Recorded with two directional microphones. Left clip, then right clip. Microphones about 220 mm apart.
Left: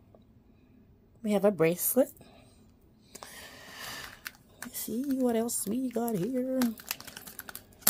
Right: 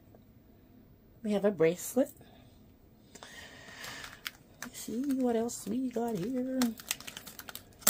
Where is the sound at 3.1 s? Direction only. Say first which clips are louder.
Left 2 dB; 35° left (ahead or behind).